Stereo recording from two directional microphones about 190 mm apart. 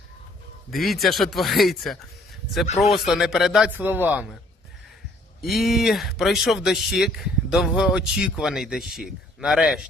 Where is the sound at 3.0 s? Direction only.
Centre (ahead or behind).